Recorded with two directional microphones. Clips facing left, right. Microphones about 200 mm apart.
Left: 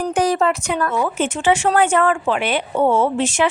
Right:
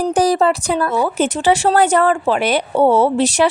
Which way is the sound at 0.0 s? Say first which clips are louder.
Right 3 dB; 35° right (ahead or behind).